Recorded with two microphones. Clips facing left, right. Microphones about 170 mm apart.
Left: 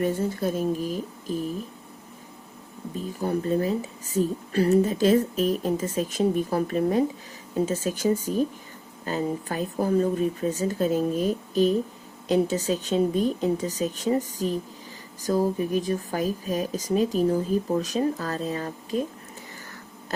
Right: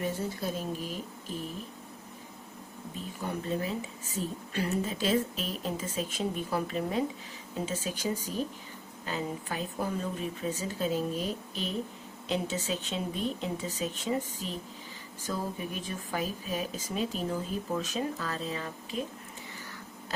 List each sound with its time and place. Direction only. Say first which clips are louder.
0.0 s speech: left 8 dB; 50° left (ahead or behind)
3.2 s speech: left 8 dB; 40° left (ahead or behind)